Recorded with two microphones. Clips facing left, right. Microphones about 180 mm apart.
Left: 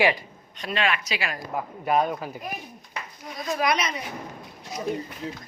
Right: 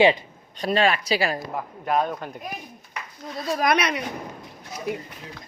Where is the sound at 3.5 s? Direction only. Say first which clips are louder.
Right 2 dB; 45° right (ahead or behind).